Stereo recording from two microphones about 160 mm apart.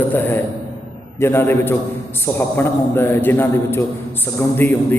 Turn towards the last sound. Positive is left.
turn(degrees=10)  # may be behind; listen again after turning